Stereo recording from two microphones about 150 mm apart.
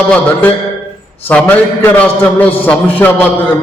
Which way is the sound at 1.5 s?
10° left (ahead or behind).